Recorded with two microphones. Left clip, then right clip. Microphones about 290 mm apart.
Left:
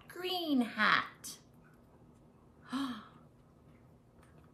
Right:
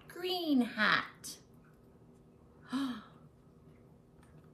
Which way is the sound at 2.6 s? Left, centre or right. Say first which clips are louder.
Right 1 dB; centre.